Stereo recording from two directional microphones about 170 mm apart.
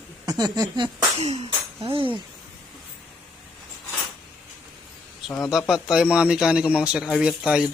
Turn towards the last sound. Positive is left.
turn(degrees=-5)  # may be behind; listen again after turning